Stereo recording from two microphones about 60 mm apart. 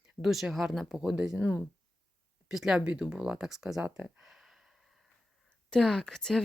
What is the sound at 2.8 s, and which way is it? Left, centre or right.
Speech, centre.